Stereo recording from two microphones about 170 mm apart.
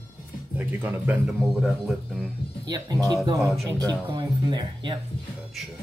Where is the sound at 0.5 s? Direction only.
10° right (ahead or behind).